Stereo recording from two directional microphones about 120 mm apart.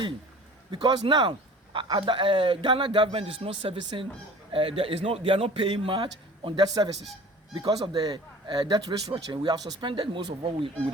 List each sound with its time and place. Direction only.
0.7 s a man's voice: 40° right (ahead or behind)